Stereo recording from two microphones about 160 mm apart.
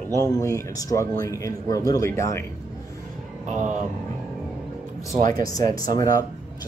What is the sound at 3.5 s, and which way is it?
Speech, 50° right (ahead or behind).